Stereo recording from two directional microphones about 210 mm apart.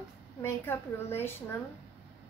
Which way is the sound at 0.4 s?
10° left (ahead or behind).